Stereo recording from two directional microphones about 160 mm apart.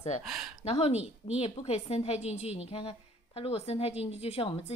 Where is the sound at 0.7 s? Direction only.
40° left (ahead or behind).